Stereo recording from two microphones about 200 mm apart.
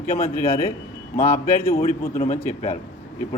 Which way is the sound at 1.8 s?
45° left (ahead or behind).